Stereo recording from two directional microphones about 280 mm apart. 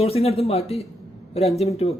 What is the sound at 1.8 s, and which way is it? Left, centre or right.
Speech, left.